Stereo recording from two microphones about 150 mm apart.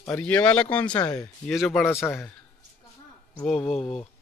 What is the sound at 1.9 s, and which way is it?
Speech, 15° left (ahead or behind).